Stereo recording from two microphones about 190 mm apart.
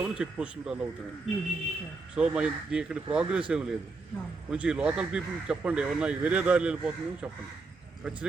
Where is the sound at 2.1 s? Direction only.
5° right (ahead or behind).